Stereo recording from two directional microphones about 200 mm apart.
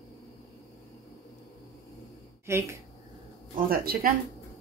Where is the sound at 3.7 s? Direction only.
45° right (ahead or behind).